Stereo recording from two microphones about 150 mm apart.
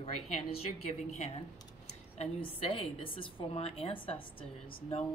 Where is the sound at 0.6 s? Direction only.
45° left (ahead or behind).